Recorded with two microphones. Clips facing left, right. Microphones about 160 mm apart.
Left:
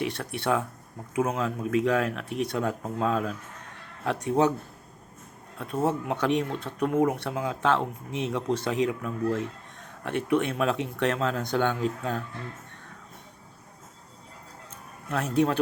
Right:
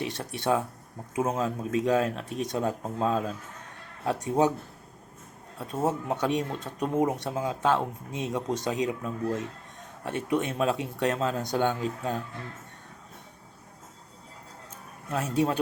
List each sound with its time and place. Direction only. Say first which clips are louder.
0.1 s speech: even; 20° right (ahead or behind)
5.5 s speech: left 1 dB; 15° right (ahead or behind)
15.1 s speech: left 2 dB; 20° right (ahead or behind)